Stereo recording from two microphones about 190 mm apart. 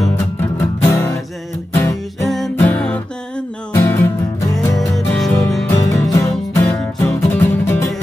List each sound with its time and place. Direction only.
0.1 s music: 15° left (ahead or behind)
2.2 s music: centre (ahead or behind)
4.7 s music: centre (ahead or behind)
5.7 s music: 20° left (ahead or behind)